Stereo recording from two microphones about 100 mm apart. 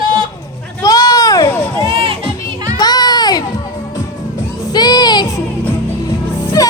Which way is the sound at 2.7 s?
40° left (ahead or behind).